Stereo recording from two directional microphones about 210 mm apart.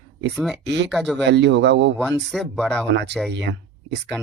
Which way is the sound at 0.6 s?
55° right (ahead or behind).